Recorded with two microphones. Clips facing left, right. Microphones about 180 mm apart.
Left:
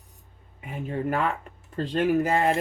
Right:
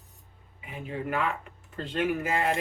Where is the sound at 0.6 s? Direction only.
45° left (ahead or behind).